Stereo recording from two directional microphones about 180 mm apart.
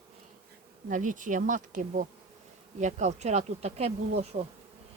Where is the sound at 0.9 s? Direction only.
45° right (ahead or behind).